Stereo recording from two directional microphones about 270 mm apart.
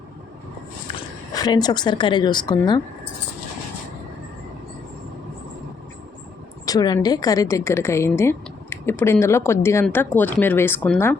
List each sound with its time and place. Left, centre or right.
1.3 s a woman's voice: centre
6.7 s a woman's voice: centre